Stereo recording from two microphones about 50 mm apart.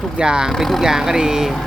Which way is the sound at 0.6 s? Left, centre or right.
Centre.